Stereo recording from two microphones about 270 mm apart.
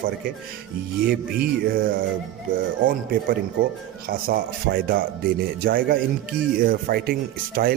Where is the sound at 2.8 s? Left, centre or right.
Right.